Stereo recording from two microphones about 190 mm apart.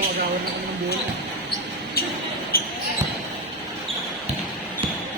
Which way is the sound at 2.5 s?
50° left (ahead or behind).